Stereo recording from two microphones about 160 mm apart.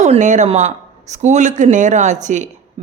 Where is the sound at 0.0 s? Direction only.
50° right (ahead or behind).